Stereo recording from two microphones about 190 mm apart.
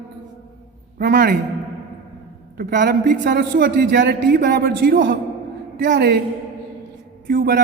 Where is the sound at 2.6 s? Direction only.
50° right (ahead or behind).